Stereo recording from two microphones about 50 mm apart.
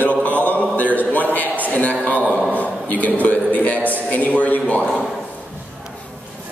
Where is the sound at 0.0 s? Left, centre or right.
Left.